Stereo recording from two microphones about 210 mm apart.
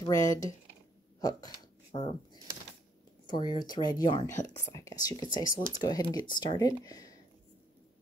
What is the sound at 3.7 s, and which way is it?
Speech, 20° left (ahead or behind).